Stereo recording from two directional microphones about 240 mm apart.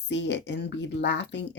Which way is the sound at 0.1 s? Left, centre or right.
Left.